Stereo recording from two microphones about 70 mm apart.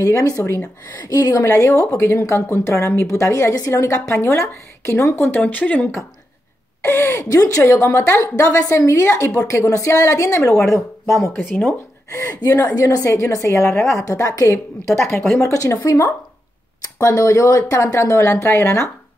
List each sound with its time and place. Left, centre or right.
0.0 s a woman's voice: left
5.4 s speech: left
6.8 s speech: left
7.2 s a woman's voice: left
7.6 s a woman's voice: left
12.4 s speech: left
12.8 s a woman's voice: left
17.0 s a woman's voice: left